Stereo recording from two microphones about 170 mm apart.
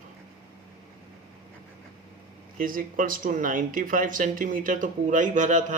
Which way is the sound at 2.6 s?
55° right (ahead or behind).